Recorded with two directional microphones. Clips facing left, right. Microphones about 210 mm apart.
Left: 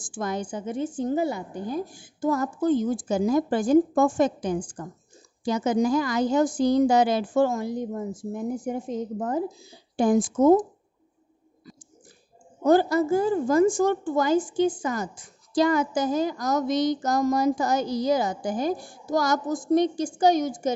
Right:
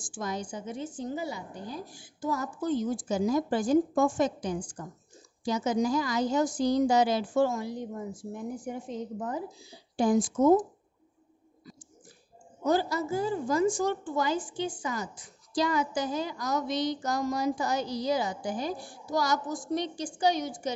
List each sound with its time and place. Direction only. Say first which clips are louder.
0.0 s a woman's voice: left 5 dB; 55° left (ahead or behind)
12.6 s a woman's voice: left 8 dB; 55° left (ahead or behind)